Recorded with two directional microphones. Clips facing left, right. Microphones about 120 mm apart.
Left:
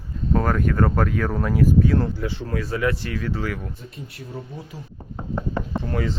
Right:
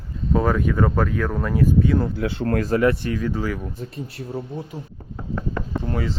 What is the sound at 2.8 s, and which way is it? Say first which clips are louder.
Speech: right 4 dB; 15° right (ahead or behind).